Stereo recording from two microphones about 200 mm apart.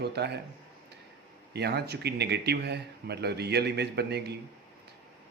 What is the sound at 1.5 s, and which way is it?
A man's voice, 55° right (ahead or behind).